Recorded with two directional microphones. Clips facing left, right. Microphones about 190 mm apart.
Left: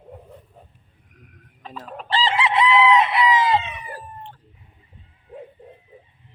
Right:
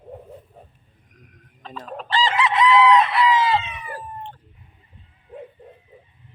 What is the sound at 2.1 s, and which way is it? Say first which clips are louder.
Chicken: even; 30° left (ahead or behind).